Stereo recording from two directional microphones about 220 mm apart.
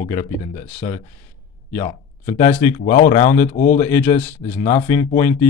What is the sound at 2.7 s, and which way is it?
Speech, 40° left (ahead or behind).